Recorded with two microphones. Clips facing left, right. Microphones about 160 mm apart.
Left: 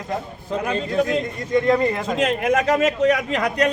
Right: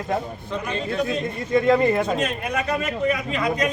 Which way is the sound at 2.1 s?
90° left.